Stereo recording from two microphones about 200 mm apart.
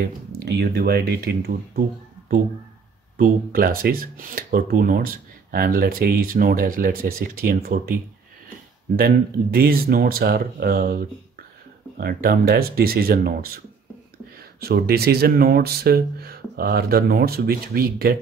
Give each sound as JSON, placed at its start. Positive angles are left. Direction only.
{"t": 0.3, "sound": "speech", "side_deg": -55}
{"t": 8.9, "sound": "speech", "side_deg": -50}
{"t": 14.6, "sound": "speech", "side_deg": -50}